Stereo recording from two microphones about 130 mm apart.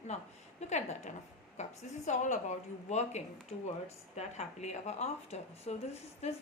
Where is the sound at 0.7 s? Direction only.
60° left (ahead or behind).